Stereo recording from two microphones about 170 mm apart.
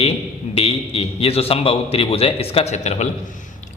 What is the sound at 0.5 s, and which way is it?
A man's voice, 35° left (ahead or behind).